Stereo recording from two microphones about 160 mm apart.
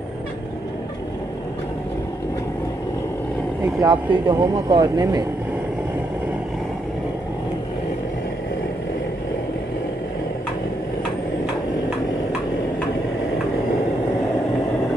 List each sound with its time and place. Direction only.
3.6 s speech: 25° right (ahead or behind)